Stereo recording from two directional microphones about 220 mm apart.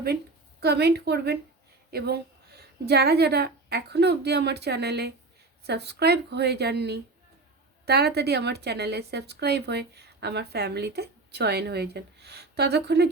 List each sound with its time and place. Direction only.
0.6 s a woman's voice: 50° right (ahead or behind)